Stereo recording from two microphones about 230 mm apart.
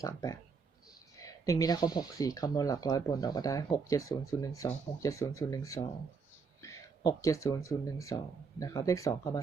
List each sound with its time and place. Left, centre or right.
0.0 s speech: centre